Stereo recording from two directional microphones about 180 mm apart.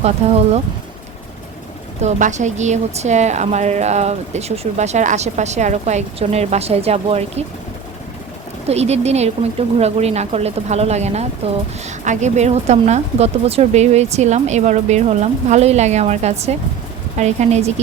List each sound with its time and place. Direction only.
0.0 s a woman's voice: 35° right (ahead or behind)
2.0 s a woman's voice: 40° right (ahead or behind)
8.6 s a woman's voice: 35° right (ahead or behind)